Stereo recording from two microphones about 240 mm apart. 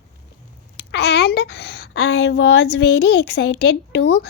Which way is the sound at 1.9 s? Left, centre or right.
Left.